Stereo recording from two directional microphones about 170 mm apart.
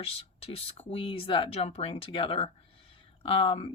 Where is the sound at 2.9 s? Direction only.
35° left (ahead or behind).